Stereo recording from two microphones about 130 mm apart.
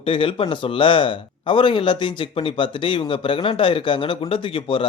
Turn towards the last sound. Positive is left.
turn(degrees=40)  # may be behind; listen again after turning